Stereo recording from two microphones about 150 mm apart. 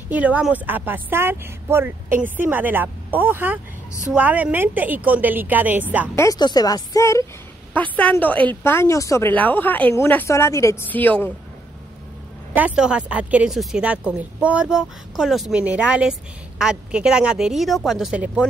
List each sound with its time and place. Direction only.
0.1 s speech: 10° right (ahead or behind)
6.1 s speech: 25° left (ahead or behind)
7.7 s speech: 10° left (ahead or behind)
12.5 s speech: 5° right (ahead or behind)